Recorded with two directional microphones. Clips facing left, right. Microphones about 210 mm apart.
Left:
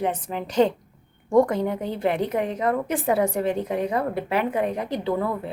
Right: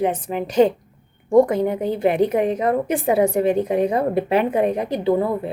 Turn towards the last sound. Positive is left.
turn(degrees=-15)  # may be behind; listen again after turning